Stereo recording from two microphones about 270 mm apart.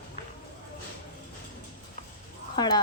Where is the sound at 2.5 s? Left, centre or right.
Centre.